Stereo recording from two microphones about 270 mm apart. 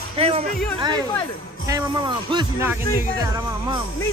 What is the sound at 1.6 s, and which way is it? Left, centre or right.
Speech, centre.